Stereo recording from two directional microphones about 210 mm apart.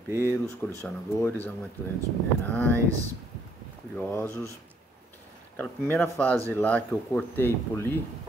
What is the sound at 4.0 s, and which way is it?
Speech, 10° left (ahead or behind).